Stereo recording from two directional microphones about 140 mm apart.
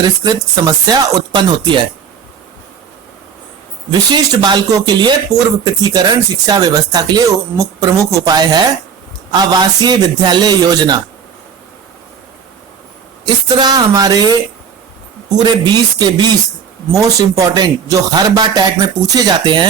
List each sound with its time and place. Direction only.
0.0 s speech: 30° right (ahead or behind)
4.1 s speech: 25° right (ahead or behind)
13.2 s speech: 30° right (ahead or behind)